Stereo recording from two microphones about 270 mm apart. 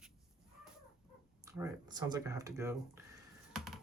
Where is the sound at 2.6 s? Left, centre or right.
Centre.